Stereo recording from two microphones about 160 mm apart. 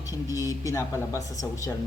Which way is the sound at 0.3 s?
20° left (ahead or behind).